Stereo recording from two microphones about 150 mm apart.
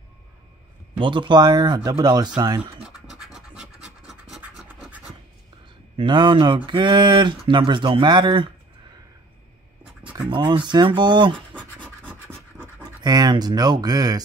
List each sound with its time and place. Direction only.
0.9 s speech: 35° right (ahead or behind)
2.8 s scratch: centre (ahead or behind)
5.9 s speech: 30° right (ahead or behind)
10.1 s speech: 30° right (ahead or behind)
11.3 s scratch: 10° left (ahead or behind)
13.0 s speech: 25° right (ahead or behind)